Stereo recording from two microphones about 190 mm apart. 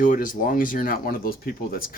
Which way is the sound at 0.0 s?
45° left (ahead or behind).